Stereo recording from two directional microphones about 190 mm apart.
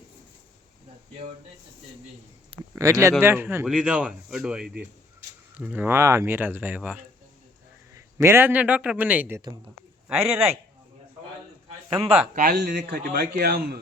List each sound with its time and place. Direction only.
2.7 s a man's voice: 15° right (ahead or behind)
12.3 s speech: 45° right (ahead or behind)